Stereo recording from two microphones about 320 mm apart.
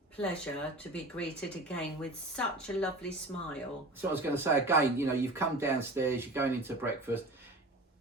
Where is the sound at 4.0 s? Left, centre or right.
Centre.